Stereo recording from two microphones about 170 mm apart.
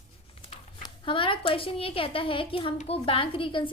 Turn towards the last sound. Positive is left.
turn(degrees=30)  # may be behind; listen again after turning